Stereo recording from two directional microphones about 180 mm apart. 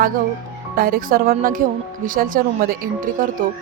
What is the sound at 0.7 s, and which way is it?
A woman's voice, 55° right (ahead or behind).